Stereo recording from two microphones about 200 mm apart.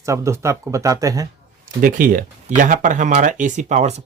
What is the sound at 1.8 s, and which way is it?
Speech, 45° right (ahead or behind).